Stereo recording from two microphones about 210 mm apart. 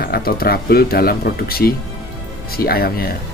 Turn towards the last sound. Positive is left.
turn(degrees=45)  # may be behind; listen again after turning